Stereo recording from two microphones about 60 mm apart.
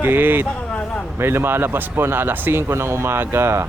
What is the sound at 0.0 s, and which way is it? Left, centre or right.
Speech, right.